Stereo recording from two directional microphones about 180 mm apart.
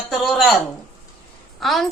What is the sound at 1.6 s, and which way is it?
Speech, centre (ahead or behind).